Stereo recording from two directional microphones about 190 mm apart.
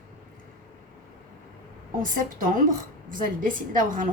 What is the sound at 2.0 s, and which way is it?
A woman's voice, 45° right (ahead or behind).